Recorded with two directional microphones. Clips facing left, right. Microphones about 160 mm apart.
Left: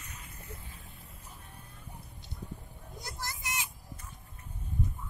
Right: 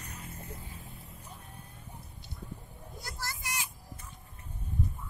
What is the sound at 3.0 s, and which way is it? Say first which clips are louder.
Children playing: even; 20° left (ahead or behind).